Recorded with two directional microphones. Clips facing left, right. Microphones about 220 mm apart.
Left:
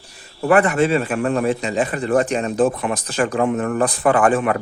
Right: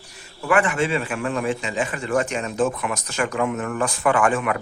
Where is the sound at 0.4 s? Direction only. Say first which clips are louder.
Left 5 dB; 40° left (ahead or behind).